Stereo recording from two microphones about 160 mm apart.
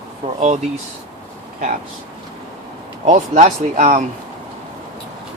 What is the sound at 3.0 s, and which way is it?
Speech, 50° right (ahead or behind).